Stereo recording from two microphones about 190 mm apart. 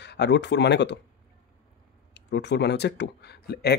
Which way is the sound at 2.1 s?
65° left (ahead or behind).